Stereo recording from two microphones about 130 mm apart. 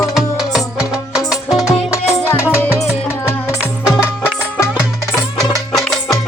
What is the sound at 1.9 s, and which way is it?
Music, 20° left (ahead or behind).